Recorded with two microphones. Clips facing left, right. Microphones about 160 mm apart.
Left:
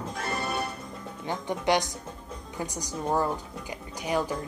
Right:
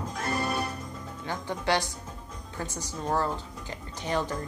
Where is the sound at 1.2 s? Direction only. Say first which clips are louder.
Left 3 dB; 20° left (ahead or behind).